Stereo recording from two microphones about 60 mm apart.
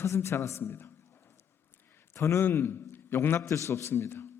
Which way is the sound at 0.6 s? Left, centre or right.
Left.